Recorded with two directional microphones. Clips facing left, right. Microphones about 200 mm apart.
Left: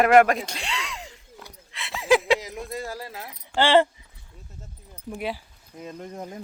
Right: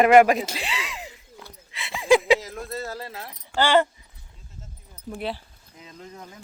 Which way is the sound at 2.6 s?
15° left (ahead or behind).